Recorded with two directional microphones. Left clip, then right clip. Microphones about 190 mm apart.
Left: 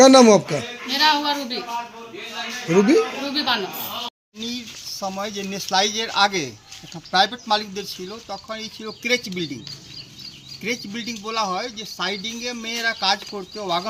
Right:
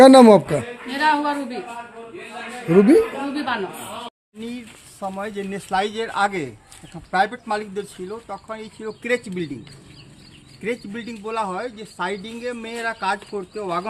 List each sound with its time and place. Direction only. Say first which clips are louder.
0.0 s a man's voice: right 2 dB; 15° right (ahead or behind)
0.9 s speech: left 1 dB; centre (ahead or behind)
2.7 s speech: right 3 dB; 20° right (ahead or behind)
3.3 s speech: left 6 dB; centre (ahead or behind)
10.6 s speech: even; centre (ahead or behind)